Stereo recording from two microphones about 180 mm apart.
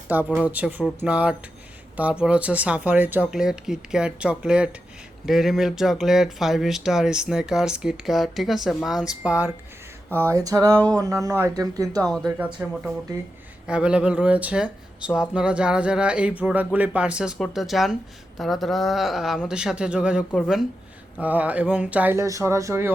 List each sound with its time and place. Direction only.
0.1 s speech: 10° right (ahead or behind)
10.2 s speech: 15° right (ahead or behind)
10.8 s a sound: 5° left (ahead or behind)
11.0 s speech: 20° right (ahead or behind)